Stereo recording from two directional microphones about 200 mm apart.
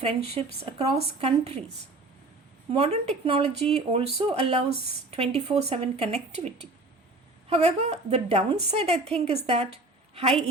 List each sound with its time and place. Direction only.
0.0 s a woman's voice: 30° right (ahead or behind)
2.7 s speech: 30° right (ahead or behind)
7.5 s a woman's voice: 30° right (ahead or behind)